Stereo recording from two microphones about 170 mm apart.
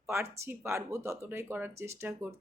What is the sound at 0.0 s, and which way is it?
Speech, 15° right (ahead or behind).